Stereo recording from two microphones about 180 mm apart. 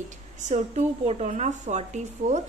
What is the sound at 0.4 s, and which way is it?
Speech, 40° right (ahead or behind).